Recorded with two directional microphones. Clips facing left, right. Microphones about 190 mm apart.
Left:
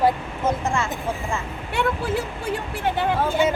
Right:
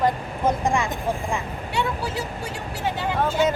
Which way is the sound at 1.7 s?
55° left (ahead or behind).